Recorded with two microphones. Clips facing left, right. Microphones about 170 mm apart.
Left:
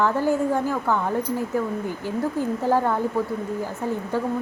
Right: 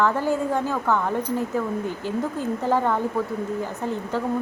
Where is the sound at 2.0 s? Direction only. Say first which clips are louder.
Left 3 dB; 15° left (ahead or behind).